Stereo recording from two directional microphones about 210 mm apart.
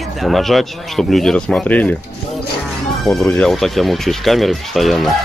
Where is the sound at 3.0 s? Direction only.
Centre (ahead or behind).